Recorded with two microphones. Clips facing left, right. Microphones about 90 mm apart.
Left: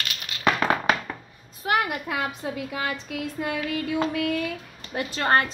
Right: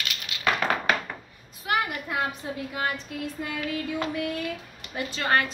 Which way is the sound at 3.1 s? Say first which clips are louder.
Left 4 dB; 60° left (ahead or behind).